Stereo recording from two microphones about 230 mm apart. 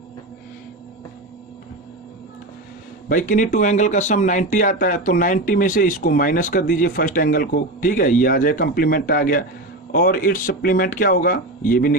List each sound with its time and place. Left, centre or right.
3.1 s speech: left